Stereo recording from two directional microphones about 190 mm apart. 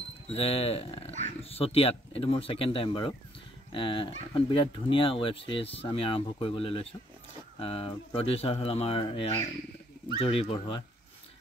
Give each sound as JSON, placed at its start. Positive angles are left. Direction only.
{"t": 0.3, "sound": "speech", "side_deg": 30}